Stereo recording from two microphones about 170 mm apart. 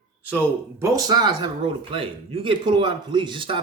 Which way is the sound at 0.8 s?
20° right (ahead or behind).